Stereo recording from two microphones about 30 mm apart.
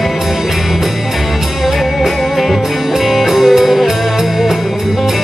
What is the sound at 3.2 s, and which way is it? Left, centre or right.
Music, centre.